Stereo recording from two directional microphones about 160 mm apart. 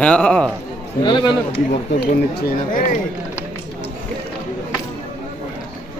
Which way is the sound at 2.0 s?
80° left.